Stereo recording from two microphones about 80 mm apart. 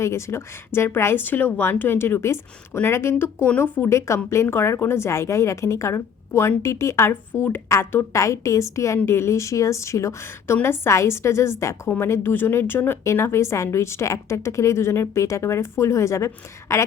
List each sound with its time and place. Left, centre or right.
0.0 s speech: left